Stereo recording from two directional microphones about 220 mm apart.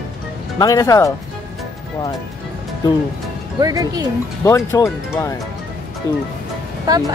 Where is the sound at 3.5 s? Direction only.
15° right (ahead or behind).